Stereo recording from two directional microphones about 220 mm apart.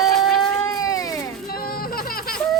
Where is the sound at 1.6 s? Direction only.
40° left (ahead or behind).